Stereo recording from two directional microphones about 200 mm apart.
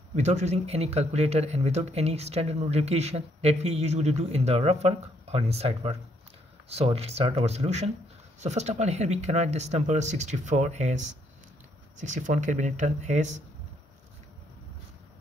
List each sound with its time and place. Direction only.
0.1 s speech: 35° right (ahead or behind)